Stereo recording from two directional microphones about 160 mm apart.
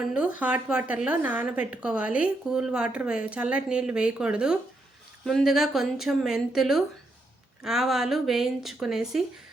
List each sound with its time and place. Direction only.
0.1 s a woman's voice: 10° right (ahead or behind)